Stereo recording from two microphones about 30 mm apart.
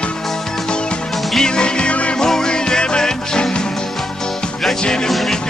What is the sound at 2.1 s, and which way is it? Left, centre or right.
Music, left.